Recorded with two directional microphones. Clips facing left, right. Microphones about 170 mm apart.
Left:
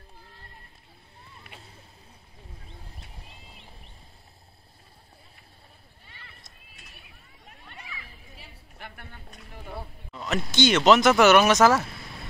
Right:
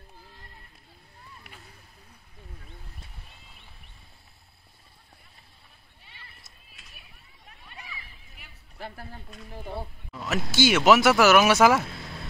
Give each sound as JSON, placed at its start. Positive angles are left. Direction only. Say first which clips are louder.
{"t": 8.4, "sound": "a sound", "louder": "left 3 dB", "side_deg": 30}
{"t": 8.7, "sound": "a woman's voice", "louder": "right 6 dB", "side_deg": -35}
{"t": 10.1, "sound": "speech", "louder": "even", "side_deg": -5}